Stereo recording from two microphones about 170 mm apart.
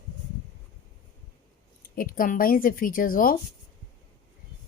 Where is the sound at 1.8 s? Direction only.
55° left (ahead or behind).